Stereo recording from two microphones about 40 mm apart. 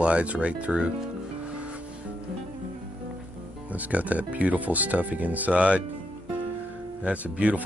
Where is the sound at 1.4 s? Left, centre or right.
Right.